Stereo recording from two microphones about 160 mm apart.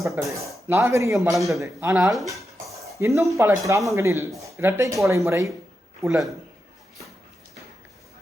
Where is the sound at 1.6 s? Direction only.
20° right (ahead or behind).